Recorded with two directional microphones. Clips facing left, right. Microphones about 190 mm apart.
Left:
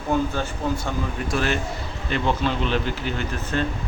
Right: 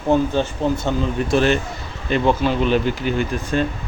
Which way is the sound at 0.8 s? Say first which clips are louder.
Right 6 dB; 25° right (ahead or behind).